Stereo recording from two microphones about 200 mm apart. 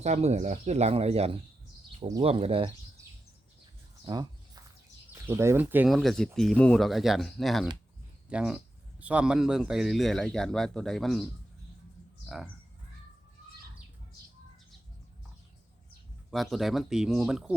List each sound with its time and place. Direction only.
0.0 s speech: 35° right (ahead or behind)
4.0 s a sound: 20° right (ahead or behind)
5.1 s speech: 10° right (ahead or behind)
16.3 s speech: centre (ahead or behind)